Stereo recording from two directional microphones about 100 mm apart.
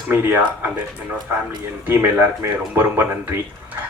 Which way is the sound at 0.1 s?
20° right (ahead or behind).